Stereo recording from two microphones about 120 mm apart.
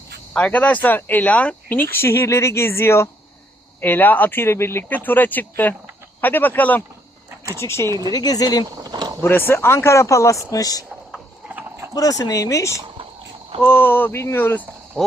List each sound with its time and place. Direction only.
0.3 s speech: 10° left (ahead or behind)
7.9 s speech: 35° right (ahead or behind)
8.1 s speech: 35° left (ahead or behind)
8.8 s a sound: 35° right (ahead or behind)
9.2 s speech: 20° left (ahead or behind)
11.9 s speech: 30° left (ahead or behind)
15.0 s a sound: centre (ahead or behind)